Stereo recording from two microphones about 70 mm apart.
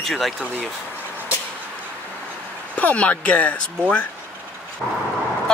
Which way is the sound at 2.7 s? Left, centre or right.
Left.